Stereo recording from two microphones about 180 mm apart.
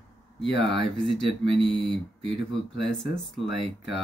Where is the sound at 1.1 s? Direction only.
30° right (ahead or behind).